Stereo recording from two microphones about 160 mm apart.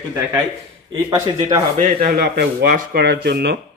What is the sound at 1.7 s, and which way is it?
Speech, 65° right (ahead or behind).